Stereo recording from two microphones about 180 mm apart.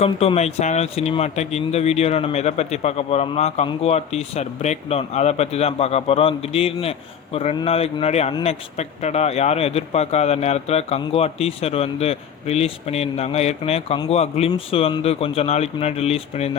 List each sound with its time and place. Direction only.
0.0 s speech: 35° left (ahead or behind)